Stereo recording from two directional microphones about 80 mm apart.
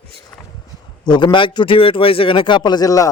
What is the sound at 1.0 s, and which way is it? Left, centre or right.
A man's voice, left.